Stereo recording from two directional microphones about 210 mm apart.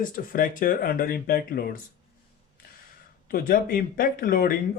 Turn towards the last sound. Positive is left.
turn(degrees=40)  # may be behind; listen again after turning